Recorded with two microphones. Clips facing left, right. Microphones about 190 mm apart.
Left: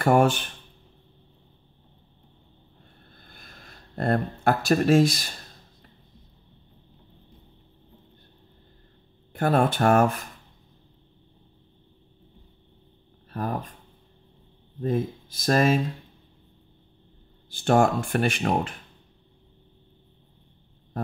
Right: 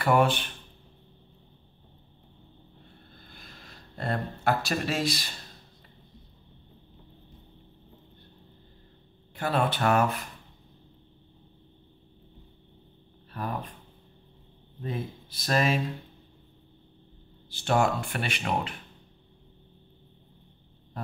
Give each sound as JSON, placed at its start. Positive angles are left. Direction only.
{"t": 0.0, "sound": "speech", "side_deg": 45}
{"t": 3.3, "sound": "a sound", "side_deg": 50}
{"t": 9.3, "sound": "speech", "side_deg": 50}
{"t": 13.3, "sound": "speech", "side_deg": 45}
{"t": 14.8, "sound": "speech", "side_deg": 45}
{"t": 17.5, "sound": "speech", "side_deg": 50}